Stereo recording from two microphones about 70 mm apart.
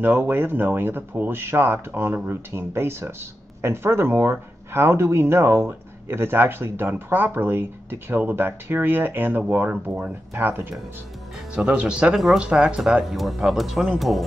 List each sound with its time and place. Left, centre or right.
0.0 s speech: right
11.5 s speech: centre